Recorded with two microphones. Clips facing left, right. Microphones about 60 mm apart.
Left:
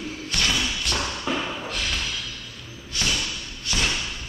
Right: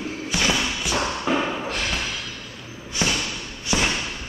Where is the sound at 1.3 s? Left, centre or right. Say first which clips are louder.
Right 4 dB; right.